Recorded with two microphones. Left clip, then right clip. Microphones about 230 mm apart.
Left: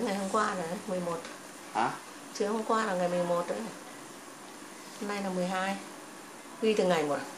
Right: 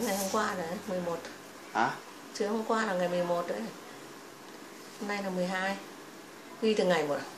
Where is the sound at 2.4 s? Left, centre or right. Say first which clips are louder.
Left 1 dB; centre.